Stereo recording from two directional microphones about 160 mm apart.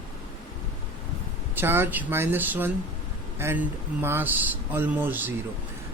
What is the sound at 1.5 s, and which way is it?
Speech, 15° right (ahead or behind).